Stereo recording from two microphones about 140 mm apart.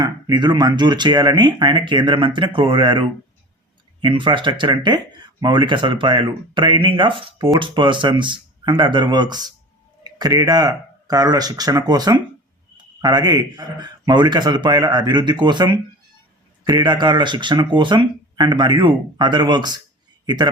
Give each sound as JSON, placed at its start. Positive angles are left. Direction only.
{"t": 0.0, "sound": "a man's voice", "side_deg": -30}